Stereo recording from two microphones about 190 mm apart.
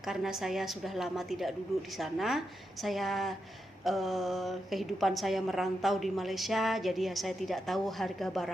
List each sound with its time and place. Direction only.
0.0 s a woman's voice: centre (ahead or behind)